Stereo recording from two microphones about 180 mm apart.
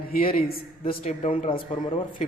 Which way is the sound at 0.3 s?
55° left (ahead or behind).